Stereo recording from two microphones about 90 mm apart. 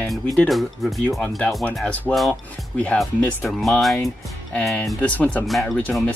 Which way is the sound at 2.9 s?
Centre (ahead or behind).